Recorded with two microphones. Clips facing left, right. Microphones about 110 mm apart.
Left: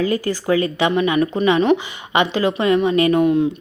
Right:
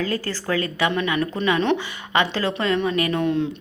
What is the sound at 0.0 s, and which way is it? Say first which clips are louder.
Speech: left 6 dB; 15° left (ahead or behind).